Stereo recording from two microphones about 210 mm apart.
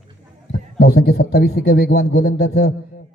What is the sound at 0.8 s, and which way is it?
A man's voice, 50° left (ahead or behind).